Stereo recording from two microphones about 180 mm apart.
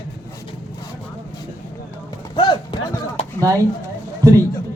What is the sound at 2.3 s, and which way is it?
Run, 25° left (ahead or behind).